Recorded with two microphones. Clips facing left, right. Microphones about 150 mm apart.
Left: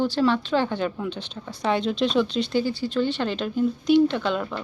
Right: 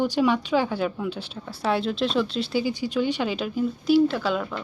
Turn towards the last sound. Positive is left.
turn(degrees=0)  # may be behind; listen again after turning